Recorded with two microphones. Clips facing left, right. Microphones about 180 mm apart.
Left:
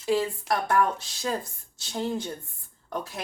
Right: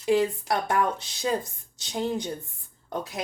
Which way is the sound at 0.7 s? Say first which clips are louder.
Left 1 dB; 15° right (ahead or behind).